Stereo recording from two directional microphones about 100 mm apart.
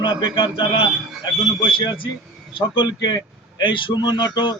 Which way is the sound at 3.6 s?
55° left (ahead or behind).